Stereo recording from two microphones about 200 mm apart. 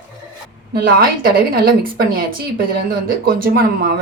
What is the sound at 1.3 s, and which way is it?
Speech, 45° right (ahead or behind).